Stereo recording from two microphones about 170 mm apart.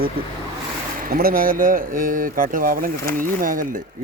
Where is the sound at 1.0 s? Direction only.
60° right (ahead or behind).